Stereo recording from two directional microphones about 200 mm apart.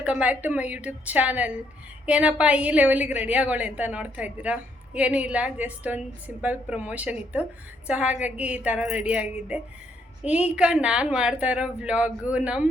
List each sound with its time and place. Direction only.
0.0 s a woman's voice: 5° right (ahead or behind)